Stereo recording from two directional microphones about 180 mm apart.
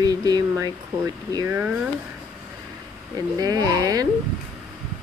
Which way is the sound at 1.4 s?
10° right (ahead or behind).